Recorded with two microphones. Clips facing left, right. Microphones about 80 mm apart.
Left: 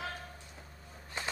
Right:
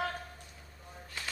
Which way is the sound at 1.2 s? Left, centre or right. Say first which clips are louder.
Left 4 dB; left.